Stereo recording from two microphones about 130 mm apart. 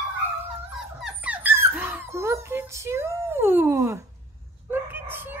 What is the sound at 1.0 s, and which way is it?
Dog, 10° right (ahead or behind).